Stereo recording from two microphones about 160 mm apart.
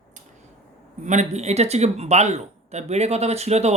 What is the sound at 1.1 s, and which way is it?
Speech, 45° right (ahead or behind).